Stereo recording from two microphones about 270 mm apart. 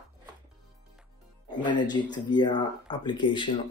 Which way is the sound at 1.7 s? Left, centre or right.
Centre.